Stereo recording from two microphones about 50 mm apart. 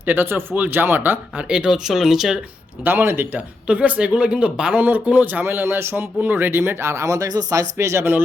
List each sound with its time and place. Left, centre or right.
0.0 s speech: right
1.4 s speech: centre
2.8 s speech: right
3.3 s speech: right
4.7 s speech: right
5.6 s speech: right
6.1 s speech: right
6.5 s speech: right